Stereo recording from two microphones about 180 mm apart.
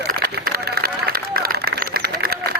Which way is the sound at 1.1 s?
60° right (ahead or behind).